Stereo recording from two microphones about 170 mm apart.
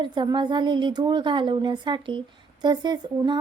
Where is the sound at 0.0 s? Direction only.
25° right (ahead or behind).